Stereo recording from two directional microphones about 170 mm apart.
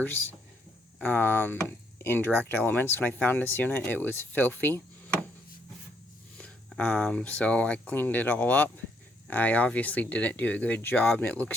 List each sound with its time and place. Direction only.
1.0 s speech: 10° left (ahead or behind)
6.3 s speech: 5° left (ahead or behind)